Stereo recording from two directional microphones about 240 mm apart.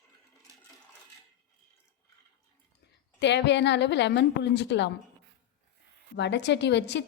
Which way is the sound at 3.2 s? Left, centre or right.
Left.